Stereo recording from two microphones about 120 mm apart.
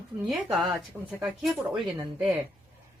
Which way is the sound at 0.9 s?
5° right (ahead or behind).